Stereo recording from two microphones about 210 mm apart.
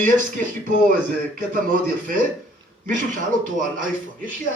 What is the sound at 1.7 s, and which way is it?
A man's voice, 40° right (ahead or behind).